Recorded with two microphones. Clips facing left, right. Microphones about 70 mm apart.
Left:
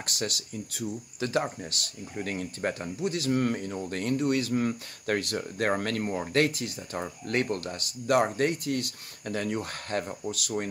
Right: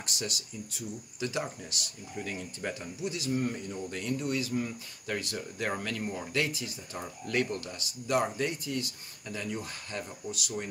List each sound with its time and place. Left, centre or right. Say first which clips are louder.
0.0 s speech: left 4 dB; left